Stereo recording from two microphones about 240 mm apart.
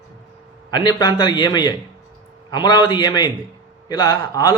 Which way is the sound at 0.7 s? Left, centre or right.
Centre.